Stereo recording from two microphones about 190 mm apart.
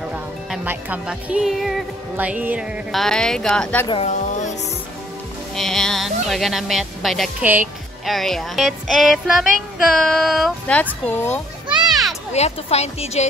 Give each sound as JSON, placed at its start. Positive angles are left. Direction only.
{"t": 0.1, "sound": "speech", "side_deg": -10}
{"t": 3.8, "sound": "speech", "side_deg": 25}
{"t": 4.2, "sound": "music", "side_deg": 40}
{"t": 5.6, "sound": "speech", "side_deg": 0}
{"t": 11.7, "sound": "children playing", "side_deg": 0}
{"t": 12.3, "sound": "speech", "side_deg": 35}